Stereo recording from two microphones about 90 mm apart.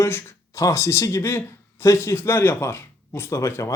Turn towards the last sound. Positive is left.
turn(degrees=30)  # may be behind; listen again after turning